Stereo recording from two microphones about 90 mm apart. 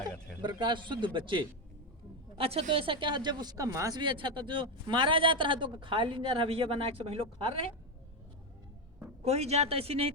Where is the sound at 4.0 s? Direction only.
60° right (ahead or behind); by 7.6 s 90° right.